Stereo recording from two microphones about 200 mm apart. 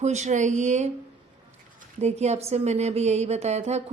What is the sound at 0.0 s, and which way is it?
Speech, 35° right (ahead or behind).